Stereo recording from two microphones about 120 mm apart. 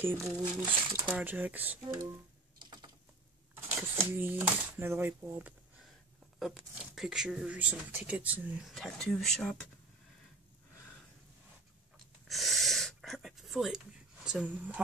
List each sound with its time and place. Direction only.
0.0 s speech: 20° right (ahead or behind)
0.4 s speech: 30° right (ahead or behind)
1.0 s speech: 10° right (ahead or behind)
2.6 s typing: 40° right (ahead or behind)
4.0 s speech: 20° right (ahead or behind)
6.4 s speech: 5° right (ahead or behind)
8.7 s speech: 5° left (ahead or behind)
12.3 s a sound: centre (ahead or behind)